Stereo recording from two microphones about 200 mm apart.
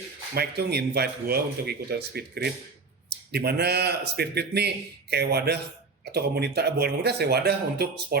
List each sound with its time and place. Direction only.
0.3 s speech: 55° right (ahead or behind)